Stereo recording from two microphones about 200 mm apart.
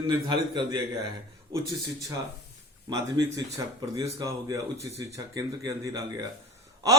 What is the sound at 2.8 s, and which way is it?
Speech, 20° right (ahead or behind).